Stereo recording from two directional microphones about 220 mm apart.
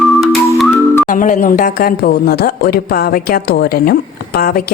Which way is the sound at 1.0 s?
35° left (ahead or behind).